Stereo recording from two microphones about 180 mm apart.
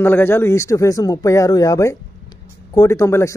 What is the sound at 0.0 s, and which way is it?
Speech, 10° left (ahead or behind).